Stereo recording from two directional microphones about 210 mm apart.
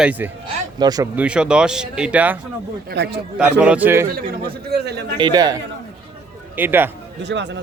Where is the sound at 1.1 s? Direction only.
5° right (ahead or behind).